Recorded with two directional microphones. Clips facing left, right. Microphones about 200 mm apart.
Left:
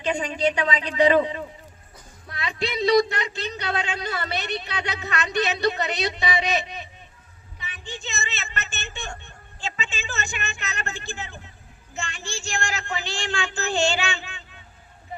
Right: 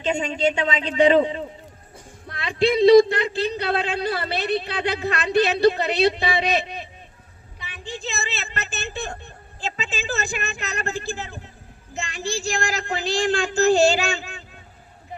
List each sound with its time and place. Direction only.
0.0 s a man's voice: 25° right (ahead or behind)
7.6 s a sound: 35° right (ahead or behind)
11.9 s a man's voice: 35° right (ahead or behind)